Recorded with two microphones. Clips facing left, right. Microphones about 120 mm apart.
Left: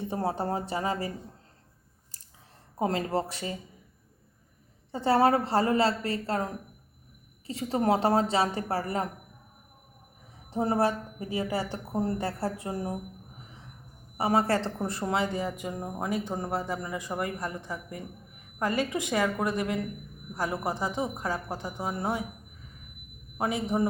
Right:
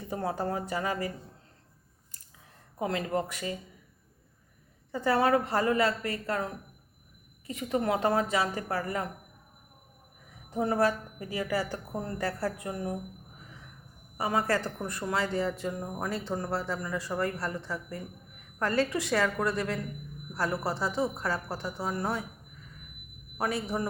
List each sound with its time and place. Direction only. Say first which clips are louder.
0.0 s a woman's voice: left 2 dB; 25° left (ahead or behind)
2.1 s a sound: even; 30° left (ahead or behind)
2.7 s speech: left 2 dB; 35° left (ahead or behind)
4.9 s a woman's voice: left 2 dB; 30° left (ahead or behind)
10.5 s a woman's voice: left 1 dB; 30° left (ahead or behind)
14.2 s speech: left 3 dB; 30° left (ahead or behind)
23.4 s a woman's voice: left 3 dB; 20° left (ahead or behind)